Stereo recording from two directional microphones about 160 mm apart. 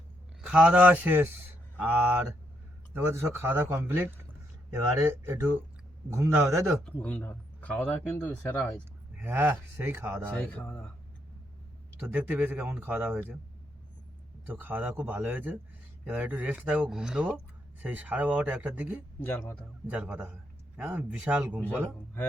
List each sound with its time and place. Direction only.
0.4 s speech: 5° right (ahead or behind)
6.1 s speech: 15° right (ahead or behind)
6.8 s speech: 10° left (ahead or behind)
9.2 s speech: 15° right (ahead or behind)
10.3 s speech: 10° left (ahead or behind)
11.9 s speech: 10° right (ahead or behind)
14.5 s speech: 15° right (ahead or behind)
19.2 s speech: 15° left (ahead or behind)
19.9 s speech: 10° right (ahead or behind)